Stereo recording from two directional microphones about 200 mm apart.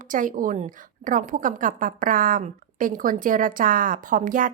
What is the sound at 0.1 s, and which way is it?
A woman's voice, 40° right (ahead or behind).